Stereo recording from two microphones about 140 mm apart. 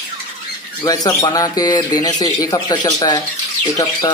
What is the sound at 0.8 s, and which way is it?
Speech, 25° left (ahead or behind).